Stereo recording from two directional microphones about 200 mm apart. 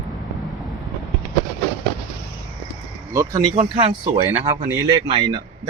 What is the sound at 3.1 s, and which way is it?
Speech, 20° right (ahead or behind).